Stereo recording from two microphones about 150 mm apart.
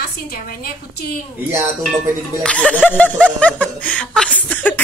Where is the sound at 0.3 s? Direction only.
85° left.